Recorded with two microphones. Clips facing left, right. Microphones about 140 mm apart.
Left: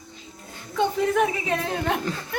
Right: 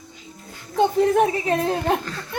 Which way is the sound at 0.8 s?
35° right (ahead or behind).